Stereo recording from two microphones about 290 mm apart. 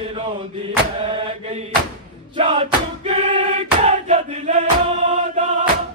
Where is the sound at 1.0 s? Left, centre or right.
Centre.